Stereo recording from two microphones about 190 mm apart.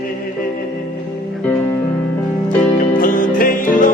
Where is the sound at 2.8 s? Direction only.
45° left (ahead or behind).